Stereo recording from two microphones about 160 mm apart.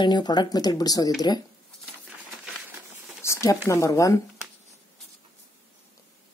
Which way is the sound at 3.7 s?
20° left (ahead or behind).